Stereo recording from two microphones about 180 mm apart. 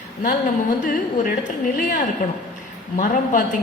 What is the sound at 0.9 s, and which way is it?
A woman's voice, 45° left (ahead or behind).